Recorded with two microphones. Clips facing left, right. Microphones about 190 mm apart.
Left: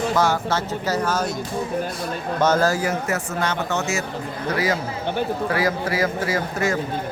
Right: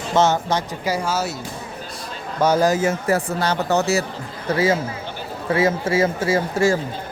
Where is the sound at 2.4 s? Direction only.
15° right (ahead or behind).